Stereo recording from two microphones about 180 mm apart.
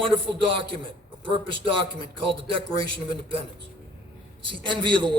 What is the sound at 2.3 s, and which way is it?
A man's voice, 30° right (ahead or behind).